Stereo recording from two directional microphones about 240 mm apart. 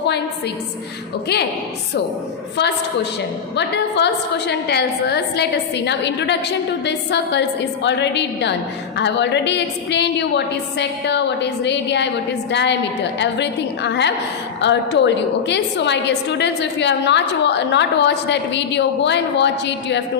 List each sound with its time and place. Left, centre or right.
2.6 s a woman's voice: left